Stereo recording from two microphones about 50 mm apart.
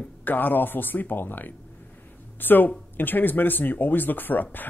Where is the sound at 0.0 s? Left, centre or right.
Left.